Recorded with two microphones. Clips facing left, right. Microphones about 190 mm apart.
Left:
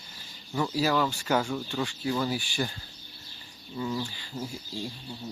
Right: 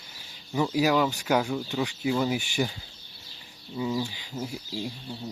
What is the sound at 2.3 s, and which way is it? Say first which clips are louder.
Speech: right 3 dB; 20° right (ahead or behind).